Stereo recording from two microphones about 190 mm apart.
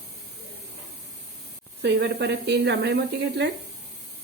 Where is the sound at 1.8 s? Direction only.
60° right (ahead or behind).